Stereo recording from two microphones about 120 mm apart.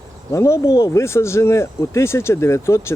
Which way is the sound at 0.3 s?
25° left (ahead or behind).